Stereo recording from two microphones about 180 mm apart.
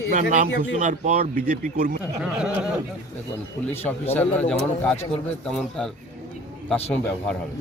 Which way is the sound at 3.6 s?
10° left (ahead or behind).